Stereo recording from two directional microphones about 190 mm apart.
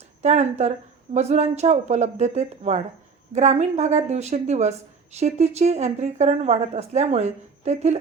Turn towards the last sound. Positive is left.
turn(degrees=-35)  # may be behind; listen again after turning